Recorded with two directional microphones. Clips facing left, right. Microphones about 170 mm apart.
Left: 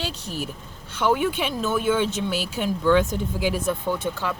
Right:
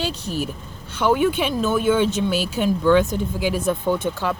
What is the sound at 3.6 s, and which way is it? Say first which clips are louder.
Speech: right 4 dB; 20° right (ahead or behind).